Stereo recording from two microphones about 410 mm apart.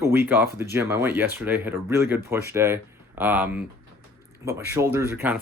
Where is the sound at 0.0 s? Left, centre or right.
Centre.